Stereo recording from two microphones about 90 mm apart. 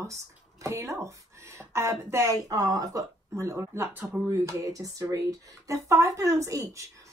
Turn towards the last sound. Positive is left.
turn(degrees=-35)  # may be behind; listen again after turning